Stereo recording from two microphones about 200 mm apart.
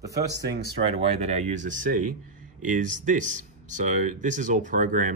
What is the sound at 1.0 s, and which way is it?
Speech, 35° right (ahead or behind).